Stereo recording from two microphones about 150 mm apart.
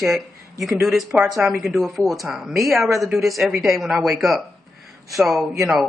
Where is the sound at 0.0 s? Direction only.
Centre (ahead or behind).